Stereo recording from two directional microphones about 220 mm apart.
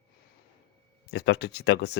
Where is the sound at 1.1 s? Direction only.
50° left (ahead or behind).